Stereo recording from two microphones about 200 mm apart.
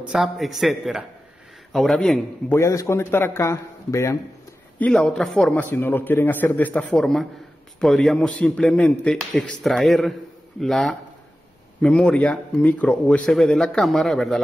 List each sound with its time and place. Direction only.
0.0 s speech: 5° right (ahead or behind)
2.6 s a man's voice: 15° left (ahead or behind)